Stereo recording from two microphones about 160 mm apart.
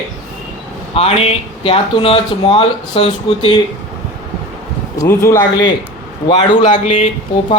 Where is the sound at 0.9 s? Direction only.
35° left (ahead or behind).